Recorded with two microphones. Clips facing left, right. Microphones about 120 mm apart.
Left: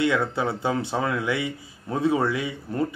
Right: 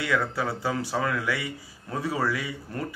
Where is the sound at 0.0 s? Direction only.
25° left (ahead or behind).